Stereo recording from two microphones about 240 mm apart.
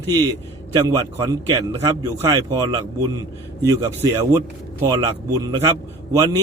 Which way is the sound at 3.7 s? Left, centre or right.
Centre.